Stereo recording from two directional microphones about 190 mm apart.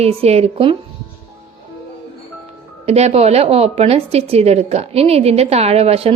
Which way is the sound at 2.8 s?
35° right (ahead or behind).